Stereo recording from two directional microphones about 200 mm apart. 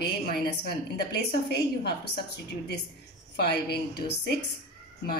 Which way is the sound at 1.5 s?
55° left (ahead or behind).